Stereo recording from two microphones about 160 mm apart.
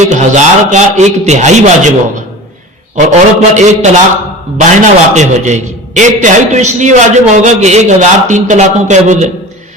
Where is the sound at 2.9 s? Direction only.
45° right (ahead or behind).